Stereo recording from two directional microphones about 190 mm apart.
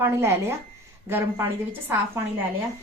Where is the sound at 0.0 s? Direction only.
15° right (ahead or behind).